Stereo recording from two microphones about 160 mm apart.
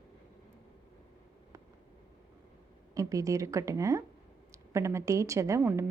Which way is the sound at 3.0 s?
20° right (ahead or behind).